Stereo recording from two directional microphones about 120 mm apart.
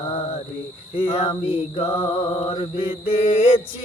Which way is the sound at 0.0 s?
50° left (ahead or behind).